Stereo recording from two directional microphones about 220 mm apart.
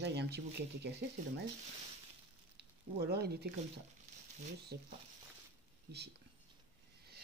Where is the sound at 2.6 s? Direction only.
45° right (ahead or behind).